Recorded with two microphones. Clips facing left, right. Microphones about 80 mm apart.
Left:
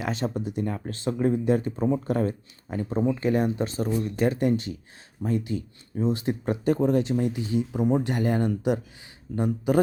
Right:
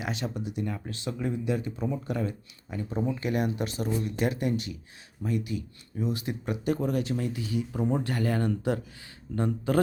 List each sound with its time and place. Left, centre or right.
0.0 s speech: left; by 9.8 s centre